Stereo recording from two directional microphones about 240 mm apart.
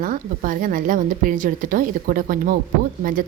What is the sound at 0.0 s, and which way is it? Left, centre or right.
Speech, right.